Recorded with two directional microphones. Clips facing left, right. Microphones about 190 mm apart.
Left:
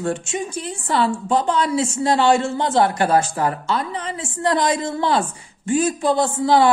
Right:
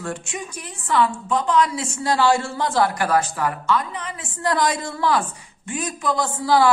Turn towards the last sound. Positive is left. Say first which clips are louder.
# left 3 dB
turn(degrees=25)  # may be behind; listen again after turning